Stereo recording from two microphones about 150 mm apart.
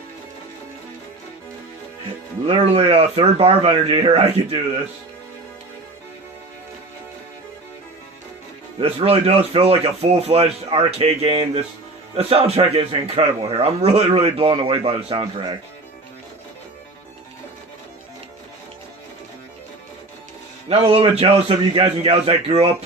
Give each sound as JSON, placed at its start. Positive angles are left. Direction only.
{"t": 2.5, "sound": "speech", "side_deg": -40}
{"t": 8.8, "sound": "speech", "side_deg": -45}
{"t": 20.7, "sound": "speech", "side_deg": -40}